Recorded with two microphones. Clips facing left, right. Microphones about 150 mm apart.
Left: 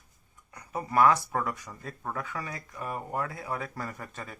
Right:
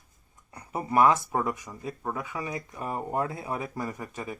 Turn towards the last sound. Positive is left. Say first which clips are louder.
# right 5 dB
turn(degrees=-15)  # may be behind; listen again after turning